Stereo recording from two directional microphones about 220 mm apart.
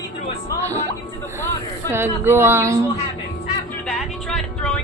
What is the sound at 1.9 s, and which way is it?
Speech, 10° right (ahead or behind).